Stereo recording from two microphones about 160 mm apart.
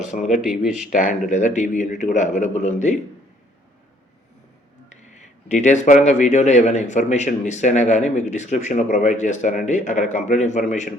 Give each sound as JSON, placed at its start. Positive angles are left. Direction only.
{"t": 0.1, "sound": "a man's voice", "side_deg": 50}
{"t": 0.4, "sound": "speech", "side_deg": -5}
{"t": 0.9, "sound": "a man's voice", "side_deg": 55}
{"t": 5.5, "sound": "a man's voice", "side_deg": 50}